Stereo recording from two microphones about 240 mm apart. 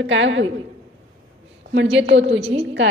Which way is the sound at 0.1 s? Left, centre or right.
Right.